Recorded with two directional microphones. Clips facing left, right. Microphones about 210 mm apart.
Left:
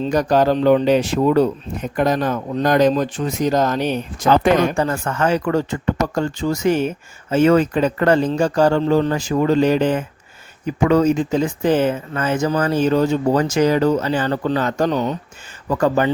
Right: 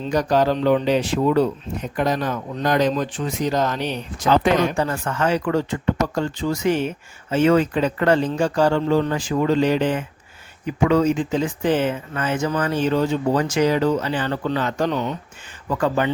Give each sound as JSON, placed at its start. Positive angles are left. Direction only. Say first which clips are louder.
{"t": 0.1, "sound": "speech", "louder": "left 2 dB", "side_deg": 45}